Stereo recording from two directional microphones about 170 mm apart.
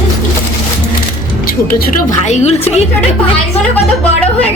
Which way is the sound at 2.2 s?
40° left (ahead or behind).